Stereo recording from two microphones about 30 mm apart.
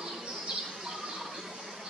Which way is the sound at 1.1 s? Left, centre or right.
Centre.